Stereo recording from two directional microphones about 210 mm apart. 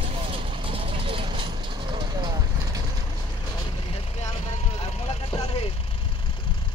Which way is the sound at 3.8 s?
30° left (ahead or behind).